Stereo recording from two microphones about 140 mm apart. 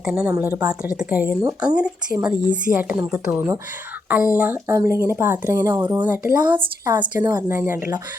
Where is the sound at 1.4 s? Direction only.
25° right (ahead or behind).